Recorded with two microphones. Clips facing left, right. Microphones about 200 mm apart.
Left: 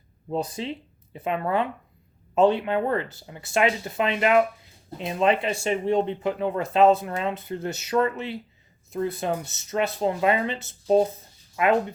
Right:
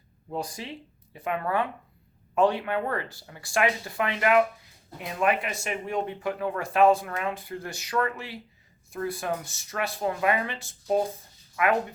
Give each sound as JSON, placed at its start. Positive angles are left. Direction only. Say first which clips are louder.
{"t": 0.3, "sound": "speech", "louder": "left 5 dB", "side_deg": 25}